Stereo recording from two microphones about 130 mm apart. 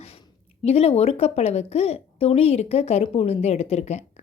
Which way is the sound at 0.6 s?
50° left (ahead or behind).